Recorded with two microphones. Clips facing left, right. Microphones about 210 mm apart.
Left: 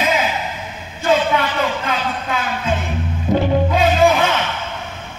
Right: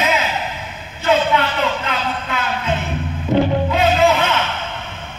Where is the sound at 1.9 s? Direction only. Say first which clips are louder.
Left 1 dB; 50° left (ahead or behind).